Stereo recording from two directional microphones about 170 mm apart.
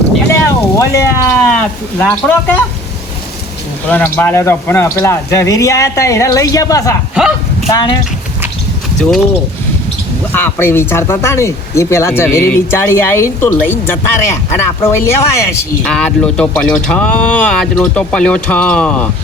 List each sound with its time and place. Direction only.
0.4 s speech: 15° left (ahead or behind)
3.8 s speech: 10° left (ahead or behind)
7.2 s a sound: 5° right (ahead or behind)
7.7 s speech: 25° left (ahead or behind)
9.0 s speech: centre (ahead or behind)
10.3 s speech: 10° left (ahead or behind)
15.9 s speech: 5° left (ahead or behind)